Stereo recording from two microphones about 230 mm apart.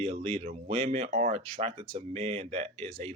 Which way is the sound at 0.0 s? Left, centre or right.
Right.